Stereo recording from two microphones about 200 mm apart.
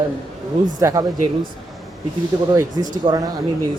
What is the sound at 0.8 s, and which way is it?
Speech, 15° right (ahead or behind).